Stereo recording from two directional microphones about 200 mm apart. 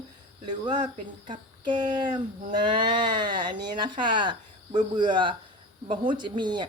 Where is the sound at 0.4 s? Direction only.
20° right (ahead or behind).